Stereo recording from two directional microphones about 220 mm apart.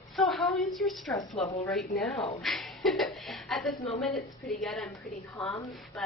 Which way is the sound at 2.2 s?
30° left (ahead or behind).